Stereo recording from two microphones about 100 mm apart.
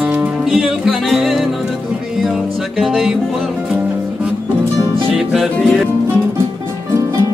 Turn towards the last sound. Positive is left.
turn(degrees=0)  # may be behind; listen again after turning